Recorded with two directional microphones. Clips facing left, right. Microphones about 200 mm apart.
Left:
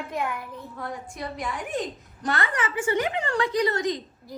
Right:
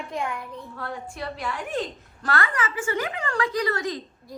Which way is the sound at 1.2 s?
15° left (ahead or behind).